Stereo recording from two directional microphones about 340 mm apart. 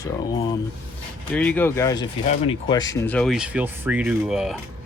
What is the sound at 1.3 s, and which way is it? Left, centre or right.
Speech, centre.